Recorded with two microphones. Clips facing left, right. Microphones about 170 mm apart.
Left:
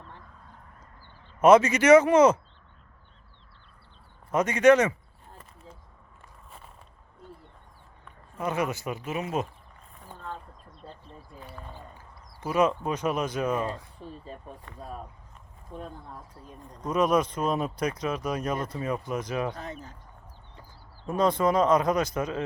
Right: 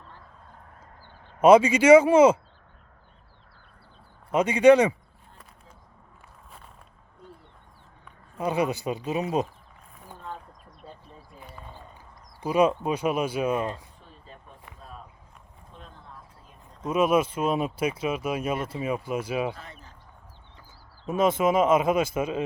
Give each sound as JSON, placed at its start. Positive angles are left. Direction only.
{"t": 1.4, "sound": "speech", "side_deg": -10}
{"t": 4.3, "sound": "speech", "side_deg": -10}
{"t": 8.4, "sound": "speech", "side_deg": -15}
{"t": 10.2, "sound": "a sound", "side_deg": -10}
{"t": 12.4, "sound": "speech", "side_deg": -10}
{"t": 14.0, "sound": "speech", "side_deg": 35}
{"t": 15.7, "sound": "speech", "side_deg": 50}
{"t": 16.8, "sound": "speech", "side_deg": -10}
{"t": 21.1, "sound": "speech", "side_deg": -20}
{"t": 21.3, "sound": "speech", "side_deg": -5}